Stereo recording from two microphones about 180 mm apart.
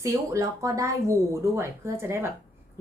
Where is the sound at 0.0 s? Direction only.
15° right (ahead or behind).